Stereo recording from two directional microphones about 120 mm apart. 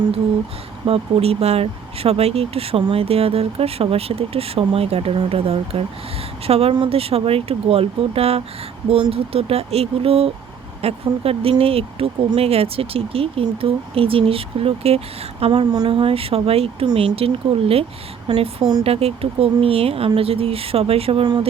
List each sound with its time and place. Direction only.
0.9 s speech: 50° right (ahead or behind)